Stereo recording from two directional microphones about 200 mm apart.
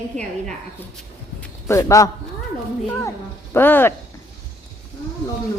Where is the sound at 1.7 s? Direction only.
15° left (ahead or behind).